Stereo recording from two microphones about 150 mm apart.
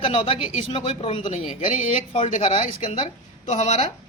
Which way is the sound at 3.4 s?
50° left (ahead or behind).